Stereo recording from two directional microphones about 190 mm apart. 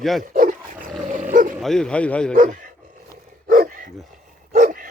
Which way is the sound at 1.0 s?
45° right (ahead or behind).